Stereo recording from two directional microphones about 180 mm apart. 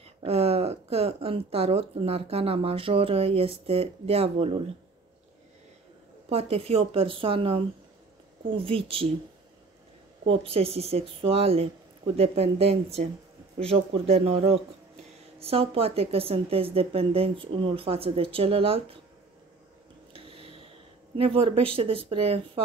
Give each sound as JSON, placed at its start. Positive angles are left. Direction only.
{"t": 0.0, "sound": "speech", "side_deg": -35}
{"t": 6.2, "sound": "speech", "side_deg": -35}
{"t": 10.4, "sound": "speech", "side_deg": -35}
{"t": 20.1, "sound": "a sound", "side_deg": -30}
{"t": 21.2, "sound": "speech", "side_deg": -30}